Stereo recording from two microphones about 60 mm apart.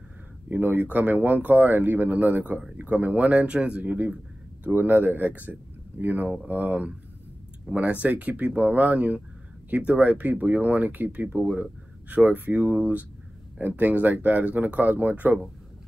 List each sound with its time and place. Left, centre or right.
0.5 s speech: right